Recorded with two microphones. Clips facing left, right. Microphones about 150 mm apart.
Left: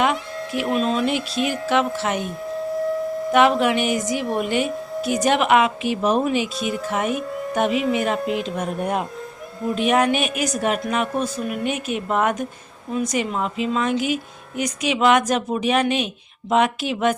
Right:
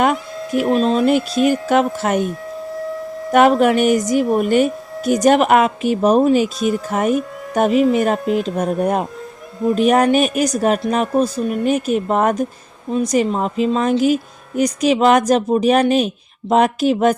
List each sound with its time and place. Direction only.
0.0 s a woman's voice: 45° right (ahead or behind)
3.3 s a woman's voice: 45° right (ahead or behind)